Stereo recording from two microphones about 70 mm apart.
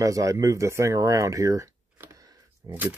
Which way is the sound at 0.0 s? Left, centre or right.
Right.